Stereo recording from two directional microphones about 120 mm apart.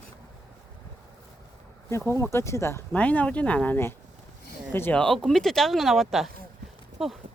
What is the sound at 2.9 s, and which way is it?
Speech, 10° left (ahead or behind).